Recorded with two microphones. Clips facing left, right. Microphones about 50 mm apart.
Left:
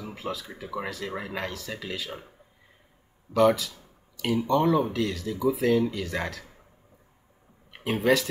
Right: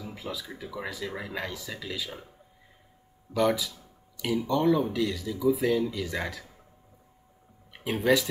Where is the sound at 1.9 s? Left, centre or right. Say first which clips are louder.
Even; centre.